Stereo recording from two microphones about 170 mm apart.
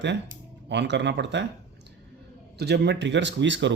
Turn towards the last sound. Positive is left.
turn(degrees=-90)